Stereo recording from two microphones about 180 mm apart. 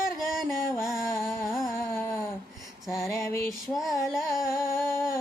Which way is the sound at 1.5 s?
Centre (ahead or behind).